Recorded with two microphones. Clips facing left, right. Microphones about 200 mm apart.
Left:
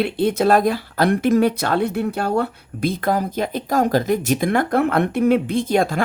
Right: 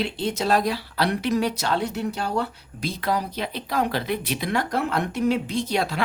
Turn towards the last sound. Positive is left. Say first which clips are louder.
# left 6 dB
turn(degrees=50)  # may be behind; listen again after turning